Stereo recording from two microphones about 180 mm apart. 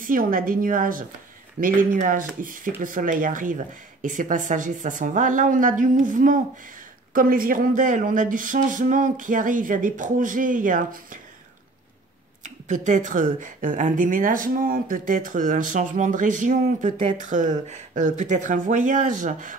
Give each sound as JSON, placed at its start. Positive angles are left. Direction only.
{"t": 0.0, "sound": "a woman's voice", "side_deg": -50}
{"t": 12.4, "sound": "a woman's voice", "side_deg": -45}